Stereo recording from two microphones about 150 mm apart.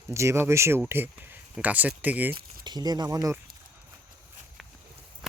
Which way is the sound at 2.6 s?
25° right (ahead or behind).